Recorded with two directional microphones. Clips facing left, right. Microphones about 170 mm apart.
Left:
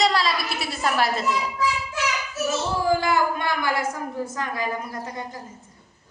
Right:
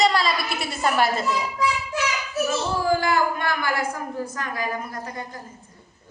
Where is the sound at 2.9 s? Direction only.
20° left (ahead or behind).